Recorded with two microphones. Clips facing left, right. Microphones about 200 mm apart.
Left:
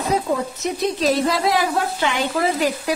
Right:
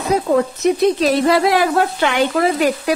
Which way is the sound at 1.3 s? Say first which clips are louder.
Right 5 dB; 65° right (ahead or behind).